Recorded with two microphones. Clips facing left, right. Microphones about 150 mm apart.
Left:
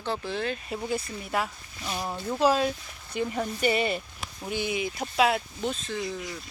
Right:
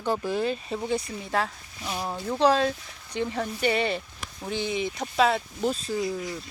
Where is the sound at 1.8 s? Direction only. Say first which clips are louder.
Right 1 dB; 10° right (ahead or behind).